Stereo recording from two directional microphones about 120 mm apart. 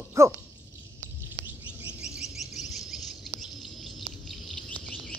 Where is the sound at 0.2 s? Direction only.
25° right (ahead or behind).